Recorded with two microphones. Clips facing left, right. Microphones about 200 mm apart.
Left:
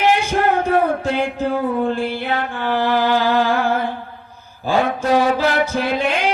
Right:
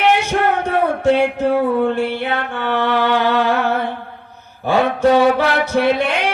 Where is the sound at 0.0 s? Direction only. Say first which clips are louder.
Right 1 dB; 70° right (ahead or behind).